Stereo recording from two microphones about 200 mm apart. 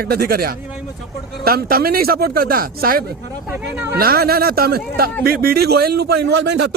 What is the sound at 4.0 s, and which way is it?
Speech, 50° right (ahead or behind).